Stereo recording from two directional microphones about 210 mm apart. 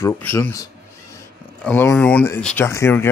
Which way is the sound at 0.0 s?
10° left (ahead or behind).